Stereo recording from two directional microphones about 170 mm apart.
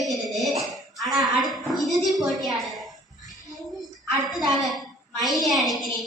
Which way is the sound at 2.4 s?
Centre (ahead or behind).